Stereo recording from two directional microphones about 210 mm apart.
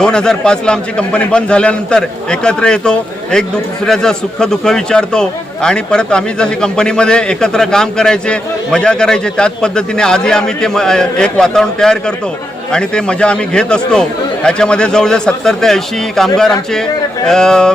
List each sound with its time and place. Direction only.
0.0 s a man's voice: 5° left (ahead or behind)